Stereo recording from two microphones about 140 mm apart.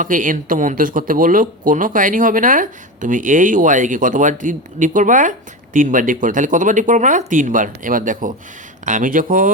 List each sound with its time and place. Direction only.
0.0 s speech: 70° right (ahead or behind)